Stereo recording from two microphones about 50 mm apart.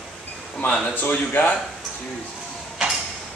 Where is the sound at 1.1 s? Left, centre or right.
Left.